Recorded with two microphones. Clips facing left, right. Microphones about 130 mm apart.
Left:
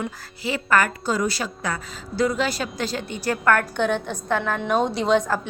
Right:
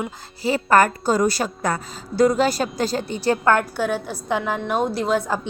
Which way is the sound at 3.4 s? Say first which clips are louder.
Even; 25° right (ahead or behind).